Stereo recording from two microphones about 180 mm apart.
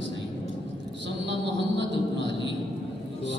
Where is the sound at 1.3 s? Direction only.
85° right.